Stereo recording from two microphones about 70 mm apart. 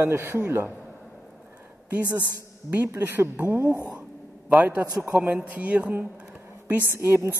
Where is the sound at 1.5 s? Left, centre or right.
Right.